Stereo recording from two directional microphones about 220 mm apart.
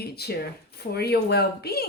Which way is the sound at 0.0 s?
45° left (ahead or behind).